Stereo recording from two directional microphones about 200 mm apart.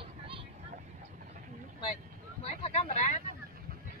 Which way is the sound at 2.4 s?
30° left (ahead or behind).